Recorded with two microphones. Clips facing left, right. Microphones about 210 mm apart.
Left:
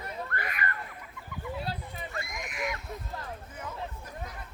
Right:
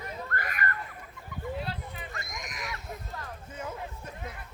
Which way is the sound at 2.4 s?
35° right (ahead or behind).